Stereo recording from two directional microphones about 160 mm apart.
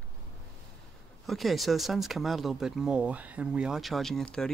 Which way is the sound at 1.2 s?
Centre (ahead or behind).